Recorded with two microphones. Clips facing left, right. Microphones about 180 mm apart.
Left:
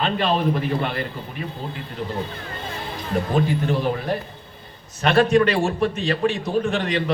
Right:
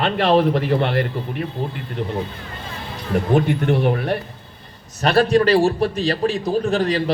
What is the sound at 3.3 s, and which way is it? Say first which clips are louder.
Speech: right 4 dB; 65° right (ahead or behind).